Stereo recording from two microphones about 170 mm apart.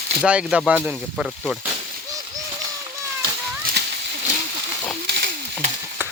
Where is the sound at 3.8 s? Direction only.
80° right.